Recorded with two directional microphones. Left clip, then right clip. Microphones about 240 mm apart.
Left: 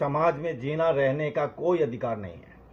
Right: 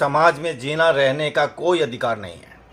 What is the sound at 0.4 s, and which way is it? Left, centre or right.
Speech, centre.